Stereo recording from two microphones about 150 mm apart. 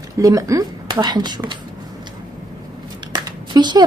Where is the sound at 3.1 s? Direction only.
25° right (ahead or behind).